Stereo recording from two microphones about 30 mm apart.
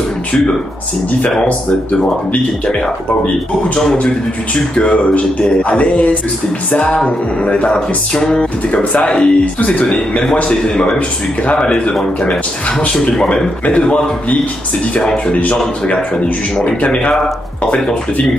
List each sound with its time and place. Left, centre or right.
1.4 s speech: left
4.7 s music: left
7.4 s music: left
9.0 s speech: left
13.1 s speech: left
16.8 s speech: left